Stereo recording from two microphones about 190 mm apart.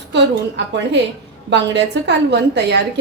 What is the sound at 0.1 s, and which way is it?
A woman's voice, 65° right (ahead or behind).